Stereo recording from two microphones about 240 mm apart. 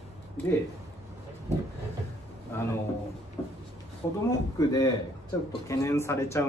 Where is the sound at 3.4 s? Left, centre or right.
Centre.